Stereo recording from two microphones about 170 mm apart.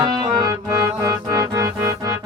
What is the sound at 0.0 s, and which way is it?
Music, 25° right (ahead or behind).